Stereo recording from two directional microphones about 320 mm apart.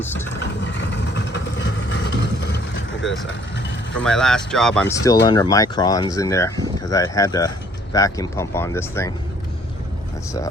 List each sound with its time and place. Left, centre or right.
0.0 s speech: centre
0.7 s vehicle: left
4.0 s speech: centre